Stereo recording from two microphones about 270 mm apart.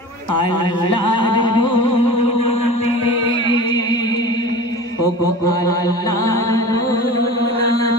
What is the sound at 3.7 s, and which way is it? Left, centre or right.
Music, centre.